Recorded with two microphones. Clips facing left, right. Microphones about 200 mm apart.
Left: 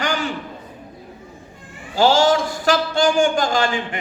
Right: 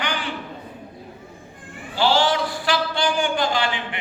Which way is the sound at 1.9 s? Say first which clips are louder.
Left 4 dB; 45° left (ahead or behind).